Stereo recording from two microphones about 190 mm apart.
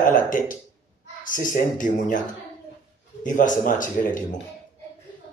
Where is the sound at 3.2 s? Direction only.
45° left (ahead or behind).